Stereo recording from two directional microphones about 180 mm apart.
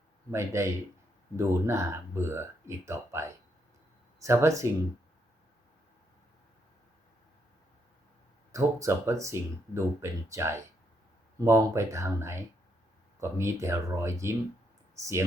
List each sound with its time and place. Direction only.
0.3 s speech: 15° right (ahead or behind)
8.5 s speech: 15° right (ahead or behind)